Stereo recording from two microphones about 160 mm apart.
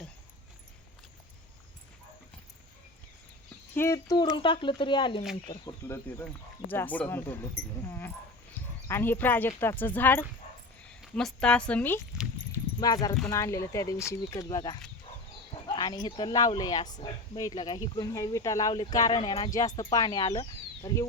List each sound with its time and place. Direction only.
3.8 s speech: 20° left (ahead or behind)
5.9 s a woman's voice: 10° left (ahead or behind)
12.1 s a sound: 5° right (ahead or behind)
12.8 s speech: 25° left (ahead or behind)